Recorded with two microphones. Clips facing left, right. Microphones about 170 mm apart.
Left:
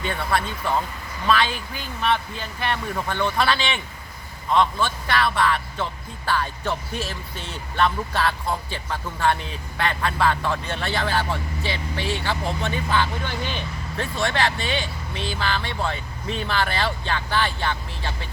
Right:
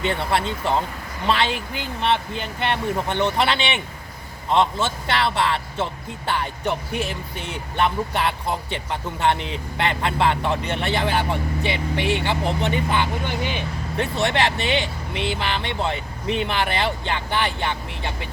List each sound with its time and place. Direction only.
0.0 s speech: 25° right (ahead or behind)